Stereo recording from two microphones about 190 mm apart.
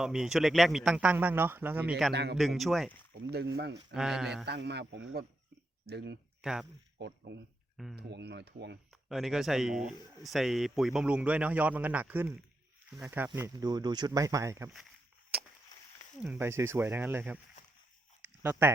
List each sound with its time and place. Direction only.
0.0 s speech: 5° right (ahead or behind)
2.1 s speech: 60° right (ahead or behind)
2.4 s speech: centre (ahead or behind)
3.2 s speech: 60° right (ahead or behind)
3.9 s speech: centre (ahead or behind)
4.4 s speech: 60° right (ahead or behind)
6.4 s speech: 5° right (ahead or behind)
7.0 s speech: 65° right (ahead or behind)
9.0 s speech: centre (ahead or behind); by 14.7 s 15° right (ahead or behind)
16.1 s speech: 5° right (ahead or behind)
18.6 s speech: 10° right (ahead or behind)